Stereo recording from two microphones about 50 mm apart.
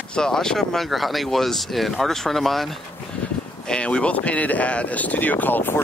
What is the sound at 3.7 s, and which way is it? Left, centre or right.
Speech, left.